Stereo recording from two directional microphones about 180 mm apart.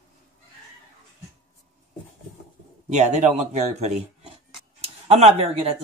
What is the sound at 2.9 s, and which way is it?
Speech, 40° right (ahead or behind).